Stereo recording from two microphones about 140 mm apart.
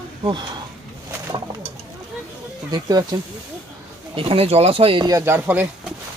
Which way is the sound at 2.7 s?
30° right (ahead or behind).